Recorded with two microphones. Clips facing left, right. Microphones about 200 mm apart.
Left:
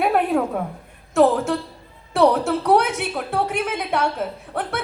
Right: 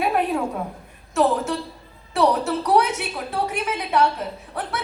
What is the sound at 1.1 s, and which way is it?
A woman's voice, 55° left (ahead or behind).